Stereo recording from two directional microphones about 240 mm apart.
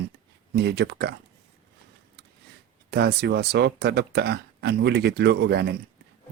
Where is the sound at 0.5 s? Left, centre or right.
Right.